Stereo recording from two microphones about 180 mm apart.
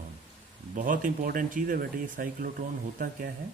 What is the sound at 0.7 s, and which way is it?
A man's voice, 50° right (ahead or behind).